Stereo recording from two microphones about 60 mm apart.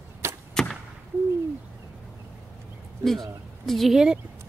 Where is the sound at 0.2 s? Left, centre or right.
Right.